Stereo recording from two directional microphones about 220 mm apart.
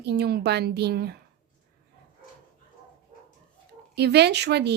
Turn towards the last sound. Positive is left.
turn(degrees=-50)  # may be behind; listen again after turning